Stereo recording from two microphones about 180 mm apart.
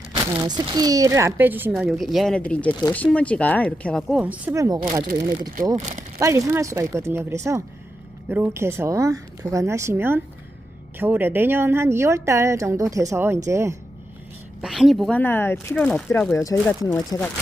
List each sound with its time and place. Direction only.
0.4 s speech: 25° right (ahead or behind)
6.1 s a woman's voice: 15° right (ahead or behind)
14.6 s speech: centre (ahead or behind)
15.2 s speech: 10° left (ahead or behind)